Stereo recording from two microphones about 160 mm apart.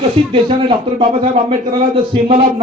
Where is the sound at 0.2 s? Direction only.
35° right (ahead or behind).